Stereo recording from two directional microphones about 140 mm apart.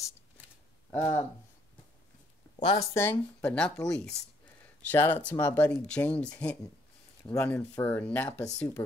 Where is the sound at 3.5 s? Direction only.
5° left (ahead or behind).